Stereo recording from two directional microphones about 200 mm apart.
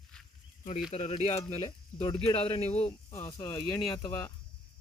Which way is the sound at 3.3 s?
20° left (ahead or behind).